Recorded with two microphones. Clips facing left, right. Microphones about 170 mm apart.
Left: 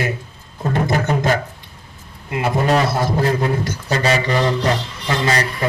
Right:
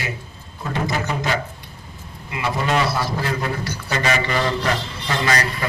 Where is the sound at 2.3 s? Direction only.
50° left (ahead or behind).